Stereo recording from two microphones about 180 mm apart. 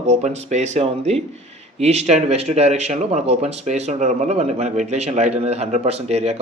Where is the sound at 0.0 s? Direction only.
40° right (ahead or behind).